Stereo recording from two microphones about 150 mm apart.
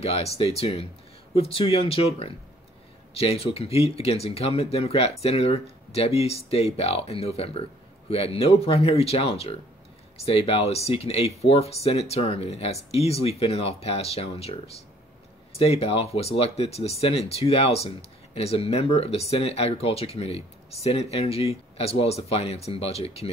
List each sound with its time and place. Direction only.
0.0 s speech: 45° left (ahead or behind)